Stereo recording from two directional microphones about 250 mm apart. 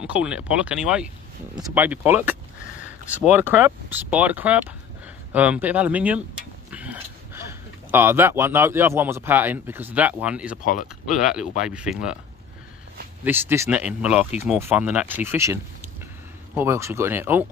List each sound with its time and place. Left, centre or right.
0.0 s speech: centre
3.3 s speech: centre
10.6 s speech: left
11.2 s speech: centre
13.2 s speech: centre